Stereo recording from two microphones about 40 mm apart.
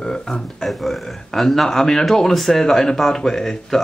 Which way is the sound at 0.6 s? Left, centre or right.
Centre.